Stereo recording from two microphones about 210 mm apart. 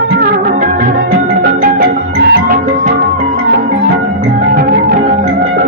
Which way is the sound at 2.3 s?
45° right (ahead or behind).